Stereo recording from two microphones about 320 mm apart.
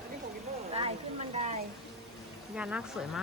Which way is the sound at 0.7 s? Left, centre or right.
Centre.